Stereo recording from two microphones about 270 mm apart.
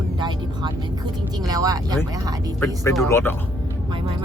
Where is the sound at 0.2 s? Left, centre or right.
Centre.